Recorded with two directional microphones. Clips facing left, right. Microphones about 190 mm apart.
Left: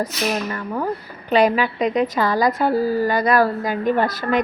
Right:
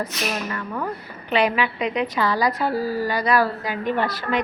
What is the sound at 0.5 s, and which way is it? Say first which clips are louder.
A woman's voice: left 4 dB; 35° left (ahead or behind).